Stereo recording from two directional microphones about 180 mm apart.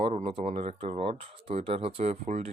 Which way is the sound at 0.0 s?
30° right (ahead or behind).